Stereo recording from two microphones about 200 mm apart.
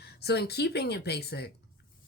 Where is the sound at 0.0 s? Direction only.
55° left (ahead or behind).